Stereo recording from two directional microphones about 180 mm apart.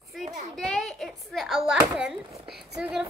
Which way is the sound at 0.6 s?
Centre (ahead or behind).